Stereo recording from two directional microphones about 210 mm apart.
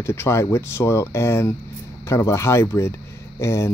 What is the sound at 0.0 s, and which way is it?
Speech, 10° left (ahead or behind).